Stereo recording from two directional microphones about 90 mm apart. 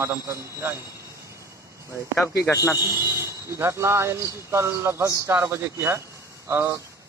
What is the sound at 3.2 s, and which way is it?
Speech, 30° right (ahead or behind).